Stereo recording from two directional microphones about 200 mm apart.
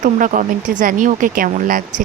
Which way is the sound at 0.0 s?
40° right (ahead or behind).